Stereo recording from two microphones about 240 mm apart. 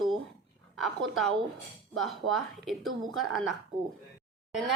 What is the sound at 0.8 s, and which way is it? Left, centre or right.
A woman's voice, centre.